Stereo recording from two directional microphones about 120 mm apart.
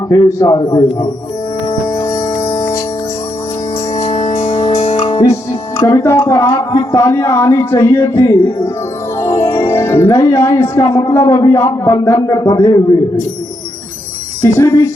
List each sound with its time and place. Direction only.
0.1 s speech: 25° left (ahead or behind)
0.5 s a man's voice: 40° left (ahead or behind)
1.9 s music: 20° left (ahead or behind)
4.0 s music: 70° left (ahead or behind)
4.4 s music: 55° left (ahead or behind)
5.2 s speech: 25° left (ahead or behind)
9.4 s music: 20° left (ahead or behind)
10.4 s speech: 25° left (ahead or behind)
14.4 s speech: 25° left (ahead or behind)